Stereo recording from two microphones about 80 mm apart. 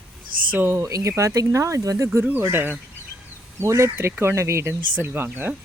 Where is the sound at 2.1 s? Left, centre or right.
Right.